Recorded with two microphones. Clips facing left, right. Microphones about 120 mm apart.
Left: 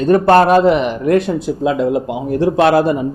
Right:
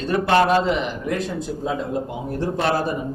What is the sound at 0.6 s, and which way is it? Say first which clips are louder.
Speech: left 10 dB; 65° left (ahead or behind).